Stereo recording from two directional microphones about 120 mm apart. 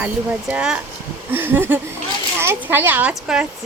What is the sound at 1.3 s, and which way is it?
A child's voice, 15° right (ahead or behind).